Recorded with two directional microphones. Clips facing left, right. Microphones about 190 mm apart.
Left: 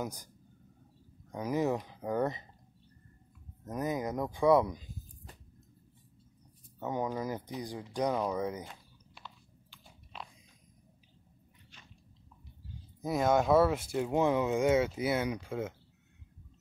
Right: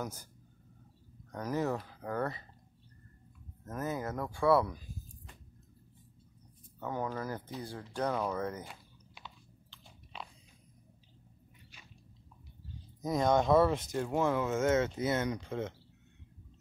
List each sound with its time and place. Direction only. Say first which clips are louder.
0.0 s speech: left 2 dB; 15° left (ahead or behind)
1.3 s speech: left 3 dB; 10° left (ahead or behind)
3.6 s speech: left 3 dB; 15° left (ahead or behind)
6.8 s speech: left 3 dB; 15° left (ahead or behind)
8.6 s typing: even; centre (ahead or behind)
13.0 s speech: left 1 dB; 5° left (ahead or behind)